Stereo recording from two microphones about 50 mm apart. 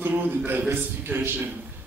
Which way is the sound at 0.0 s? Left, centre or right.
Right.